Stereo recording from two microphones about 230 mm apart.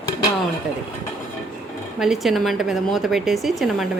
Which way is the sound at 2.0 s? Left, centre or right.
Centre.